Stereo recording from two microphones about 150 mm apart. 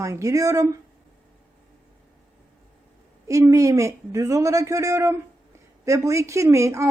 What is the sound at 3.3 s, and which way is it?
Speech, 20° right (ahead or behind).